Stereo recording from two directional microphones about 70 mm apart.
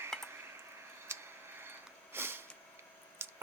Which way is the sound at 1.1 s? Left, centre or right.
Right.